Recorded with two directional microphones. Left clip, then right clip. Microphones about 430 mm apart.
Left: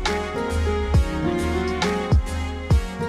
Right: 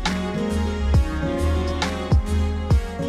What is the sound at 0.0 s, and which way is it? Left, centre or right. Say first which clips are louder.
Music: left 2 dB; centre.